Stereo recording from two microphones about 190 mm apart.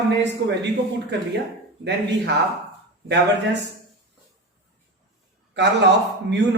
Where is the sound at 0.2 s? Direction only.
65° right (ahead or behind).